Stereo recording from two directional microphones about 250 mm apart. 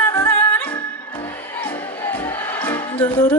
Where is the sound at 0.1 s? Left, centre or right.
Centre.